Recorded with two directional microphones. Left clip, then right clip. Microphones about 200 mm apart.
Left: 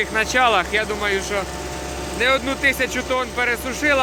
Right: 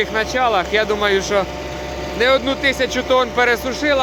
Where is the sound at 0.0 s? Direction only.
5° right (ahead or behind).